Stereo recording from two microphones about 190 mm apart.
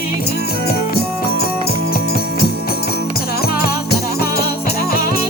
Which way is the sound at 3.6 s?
55° left (ahead or behind).